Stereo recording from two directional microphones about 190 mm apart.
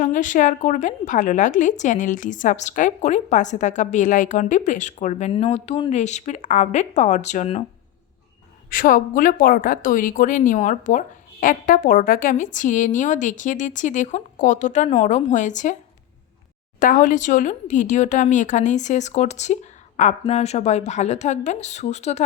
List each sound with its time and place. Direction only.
0.0 s a woman's voice: 40° left (ahead or behind)
8.7 s a woman's voice: 45° left (ahead or behind)
16.8 s a woman's voice: 45° left (ahead or behind)